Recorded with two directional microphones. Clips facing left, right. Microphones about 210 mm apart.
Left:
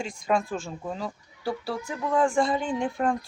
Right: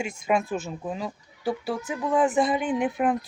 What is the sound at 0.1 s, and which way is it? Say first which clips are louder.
Speech: left 1 dB; 20° right (ahead or behind).